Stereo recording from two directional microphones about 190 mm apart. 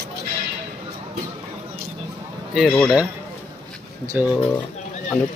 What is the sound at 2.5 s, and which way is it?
Speech, centre (ahead or behind).